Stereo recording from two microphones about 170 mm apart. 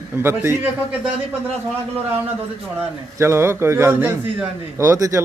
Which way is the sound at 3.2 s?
15° right (ahead or behind).